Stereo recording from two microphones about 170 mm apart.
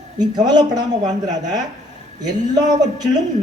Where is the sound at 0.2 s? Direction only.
25° right (ahead or behind).